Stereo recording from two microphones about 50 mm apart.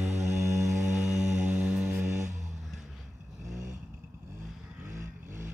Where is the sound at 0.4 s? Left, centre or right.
Right.